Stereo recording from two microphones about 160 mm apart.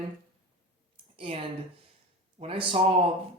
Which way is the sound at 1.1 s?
35° right (ahead or behind).